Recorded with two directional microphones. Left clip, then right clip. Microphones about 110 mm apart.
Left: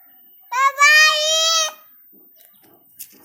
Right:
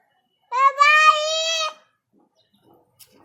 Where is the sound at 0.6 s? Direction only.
35° right (ahead or behind).